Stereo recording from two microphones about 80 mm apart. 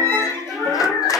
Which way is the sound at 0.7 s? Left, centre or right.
Left.